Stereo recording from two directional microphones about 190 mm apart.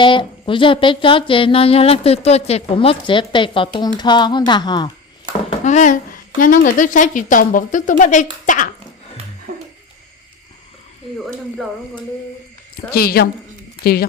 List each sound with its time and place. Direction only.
0.0 s speech: 25° left (ahead or behind)
5.5 s a sound: 40° left (ahead or behind)
6.4 s speech: 45° left (ahead or behind)
12.9 s speech: 55° left (ahead or behind)